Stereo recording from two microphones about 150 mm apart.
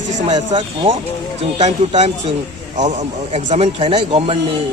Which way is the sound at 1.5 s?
45° right (ahead or behind).